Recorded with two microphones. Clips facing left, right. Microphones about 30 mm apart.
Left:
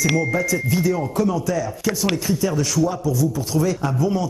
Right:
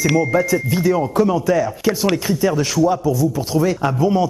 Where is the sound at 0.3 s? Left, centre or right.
Centre.